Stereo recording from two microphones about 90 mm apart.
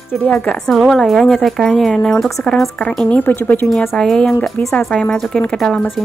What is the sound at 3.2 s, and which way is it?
Speech, 20° left (ahead or behind).